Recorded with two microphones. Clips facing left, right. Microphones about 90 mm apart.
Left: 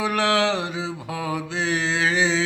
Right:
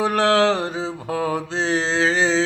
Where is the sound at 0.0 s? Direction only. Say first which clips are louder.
Right 4 dB; 35° right (ahead or behind).